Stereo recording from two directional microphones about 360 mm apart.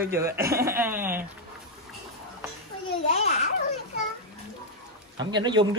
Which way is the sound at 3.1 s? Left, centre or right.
Centre.